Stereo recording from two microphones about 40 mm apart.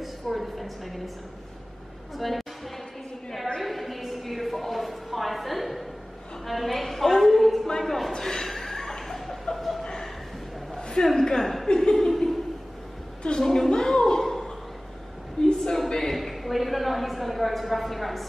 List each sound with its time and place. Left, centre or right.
0.0 s a sound: centre
2.1 s a woman's voice: centre
3.5 s a sound: centre
6.4 s a woman's voice: centre
8.1 s chuckle: centre
10.8 s a woman's voice: centre
11.6 s chuckle: centre
13.4 s a woman's voice: centre
13.7 s music: centre
15.4 s a sound: centre
16.1 s a woman's voice: centre